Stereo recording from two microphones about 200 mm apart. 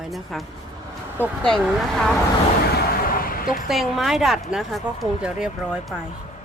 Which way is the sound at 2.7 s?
45° left (ahead or behind).